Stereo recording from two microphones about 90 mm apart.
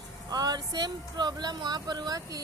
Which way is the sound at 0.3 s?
45° right (ahead or behind).